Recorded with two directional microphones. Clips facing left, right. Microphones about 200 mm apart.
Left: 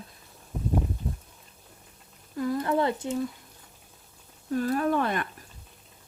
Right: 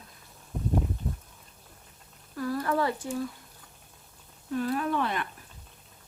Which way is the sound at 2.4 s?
20° left (ahead or behind).